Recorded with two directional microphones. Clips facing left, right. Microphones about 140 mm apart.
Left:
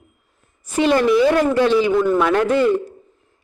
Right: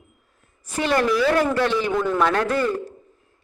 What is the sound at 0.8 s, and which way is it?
A man's voice, 20° left (ahead or behind).